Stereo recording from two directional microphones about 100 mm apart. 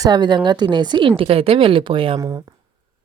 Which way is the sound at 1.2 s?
75° right (ahead or behind).